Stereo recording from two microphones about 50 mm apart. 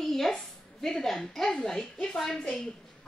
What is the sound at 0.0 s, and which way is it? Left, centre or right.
A woman's voice, centre.